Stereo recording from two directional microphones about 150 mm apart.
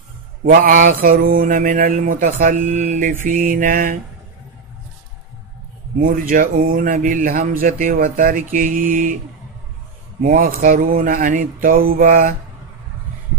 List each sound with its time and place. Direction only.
0.5 s speech: 65° right (ahead or behind)
5.9 s speech: 70° right (ahead or behind)
10.2 s speech: 70° right (ahead or behind)